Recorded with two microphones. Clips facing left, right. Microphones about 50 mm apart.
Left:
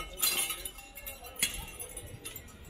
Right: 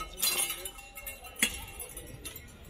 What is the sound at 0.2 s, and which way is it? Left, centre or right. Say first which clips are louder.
Glass: left 1 dB; centre.